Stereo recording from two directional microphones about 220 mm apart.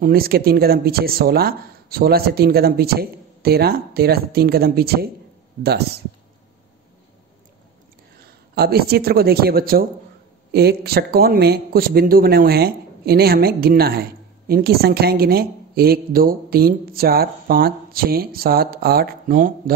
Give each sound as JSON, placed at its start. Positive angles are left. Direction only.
{"t": 0.0, "sound": "a woman's voice", "side_deg": -45}
{"t": 8.2, "sound": "a woman's voice", "side_deg": -45}